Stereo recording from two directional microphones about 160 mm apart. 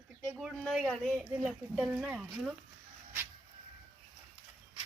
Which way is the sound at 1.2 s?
10° right (ahead or behind).